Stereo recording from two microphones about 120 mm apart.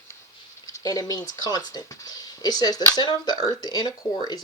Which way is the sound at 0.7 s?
30° left (ahead or behind).